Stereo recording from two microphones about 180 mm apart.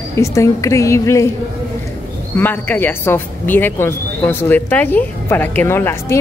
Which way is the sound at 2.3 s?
10° left (ahead or behind).